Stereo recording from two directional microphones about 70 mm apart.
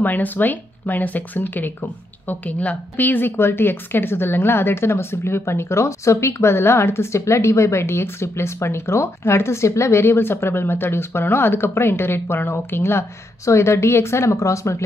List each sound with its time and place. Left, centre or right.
0.0 s a woman's voice: left